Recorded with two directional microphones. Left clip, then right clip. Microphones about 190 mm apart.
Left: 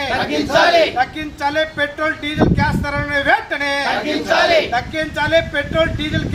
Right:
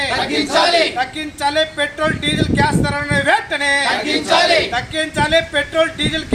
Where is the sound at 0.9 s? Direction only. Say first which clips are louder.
Left 2 dB; centre (ahead or behind).